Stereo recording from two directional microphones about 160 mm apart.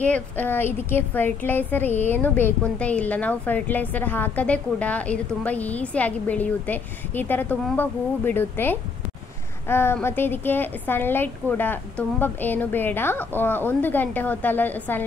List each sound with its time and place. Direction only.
0.0 s a woman's voice: 10° left (ahead or behind)